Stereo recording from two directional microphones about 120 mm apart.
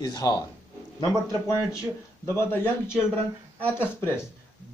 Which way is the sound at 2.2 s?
20° left (ahead or behind).